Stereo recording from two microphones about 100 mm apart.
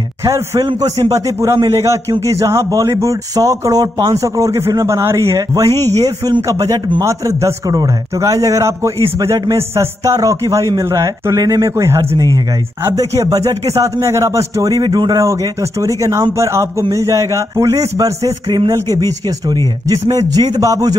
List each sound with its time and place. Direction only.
0.2 s a man's voice: 35° right (ahead or behind)
15.1 s a man's voice: 30° right (ahead or behind)